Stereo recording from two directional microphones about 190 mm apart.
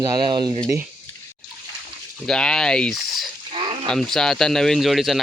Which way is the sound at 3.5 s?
30° right (ahead or behind).